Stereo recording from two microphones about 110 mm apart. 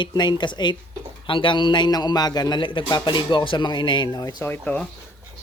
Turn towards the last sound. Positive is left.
turn(degrees=15)  # may be behind; listen again after turning